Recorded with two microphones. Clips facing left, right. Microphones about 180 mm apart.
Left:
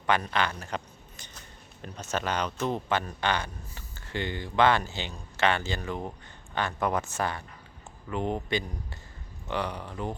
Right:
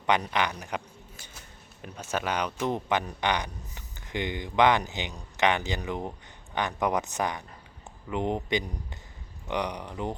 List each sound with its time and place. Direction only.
0.1 s speech: 15° right (ahead or behind)
1.1 s scissors: 5° right (ahead or behind)
1.8 s speech: 10° right (ahead or behind)